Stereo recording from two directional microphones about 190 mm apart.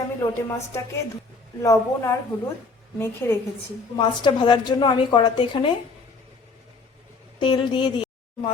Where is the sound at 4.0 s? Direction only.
25° left (ahead or behind).